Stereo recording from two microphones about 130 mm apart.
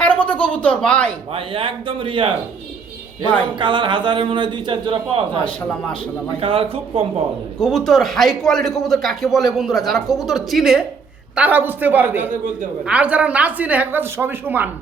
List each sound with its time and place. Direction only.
0.0 s speech: 10° left (ahead or behind)
1.3 s a man's voice: 45° right (ahead or behind)
3.6 s a man's voice: 40° right (ahead or behind)
5.5 s speech: 10° left (ahead or behind)
6.4 s a man's voice: 45° right (ahead or behind)
7.6 s a man's voice: centre (ahead or behind)
11.3 s a woman's voice: 15° right (ahead or behind)